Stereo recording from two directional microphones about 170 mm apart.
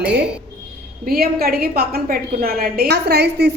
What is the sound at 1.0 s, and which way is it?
A woman's voice, 60° right (ahead or behind).